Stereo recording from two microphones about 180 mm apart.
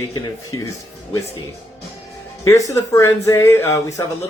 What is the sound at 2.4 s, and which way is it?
Speech, 15° left (ahead or behind).